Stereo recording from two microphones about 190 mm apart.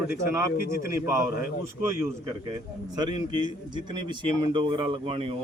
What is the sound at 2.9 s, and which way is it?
A man's voice, 25° right (ahead or behind).